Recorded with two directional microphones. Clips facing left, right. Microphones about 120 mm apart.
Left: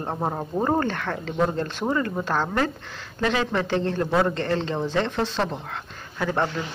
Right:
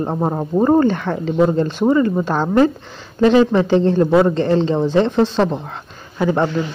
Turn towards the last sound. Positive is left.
turn(degrees=-15)  # may be behind; listen again after turning